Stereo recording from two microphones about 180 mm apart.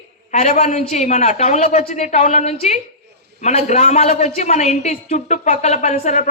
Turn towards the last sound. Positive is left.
turn(degrees=45)  # may be behind; listen again after turning